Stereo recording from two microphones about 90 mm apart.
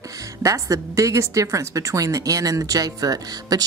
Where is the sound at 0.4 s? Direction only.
40° right (ahead or behind).